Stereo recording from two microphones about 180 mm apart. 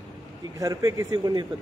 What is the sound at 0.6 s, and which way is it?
Speech, 20° right (ahead or behind).